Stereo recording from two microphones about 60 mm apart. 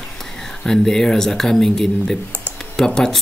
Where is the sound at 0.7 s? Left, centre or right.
Centre.